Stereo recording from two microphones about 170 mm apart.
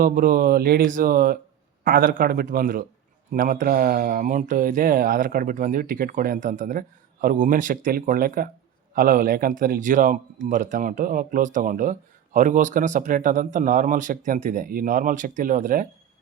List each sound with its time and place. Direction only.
0.0 s speech: 55° right (ahead or behind)